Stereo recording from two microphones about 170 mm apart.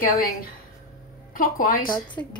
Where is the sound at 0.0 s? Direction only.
55° left (ahead or behind).